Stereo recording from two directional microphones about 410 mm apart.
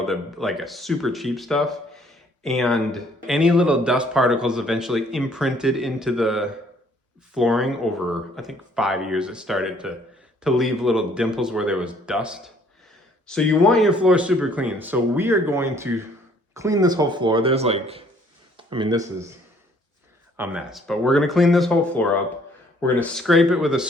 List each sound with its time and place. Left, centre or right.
0.0 s speech: centre
18.5 s a sound: centre
20.3 s speech: centre